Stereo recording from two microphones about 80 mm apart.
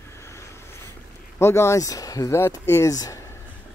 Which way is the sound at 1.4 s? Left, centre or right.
Left.